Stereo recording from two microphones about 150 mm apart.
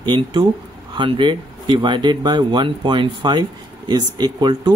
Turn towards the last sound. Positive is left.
turn(degrees=-30)  # may be behind; listen again after turning